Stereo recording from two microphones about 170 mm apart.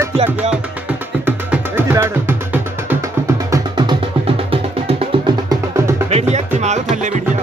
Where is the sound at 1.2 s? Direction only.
10° right (ahead or behind).